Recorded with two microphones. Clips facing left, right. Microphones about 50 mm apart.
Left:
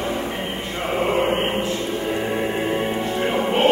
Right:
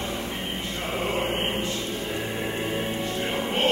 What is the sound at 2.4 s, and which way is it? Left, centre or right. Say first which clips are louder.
Music: left 6 dB; centre.